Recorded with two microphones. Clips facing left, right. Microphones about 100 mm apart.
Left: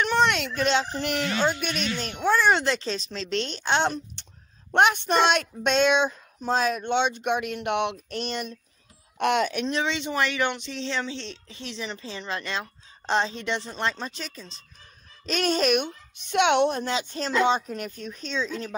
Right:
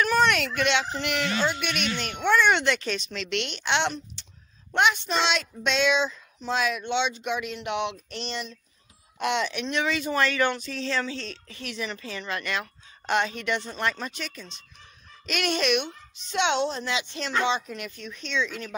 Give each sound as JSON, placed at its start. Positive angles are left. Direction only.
{"t": 0.0, "sound": "a sound", "side_deg": 25}
{"t": 0.6, "sound": "speech", "side_deg": 35}
{"t": 4.7, "sound": "speech", "side_deg": 50}
{"t": 9.7, "sound": "speech", "side_deg": 30}